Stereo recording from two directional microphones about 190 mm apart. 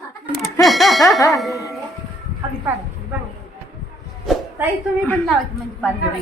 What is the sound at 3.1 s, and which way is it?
Clip-clop, 10° right (ahead or behind).